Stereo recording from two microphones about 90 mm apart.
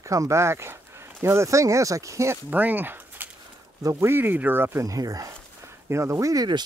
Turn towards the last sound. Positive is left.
turn(degrees=-40)  # may be behind; listen again after turning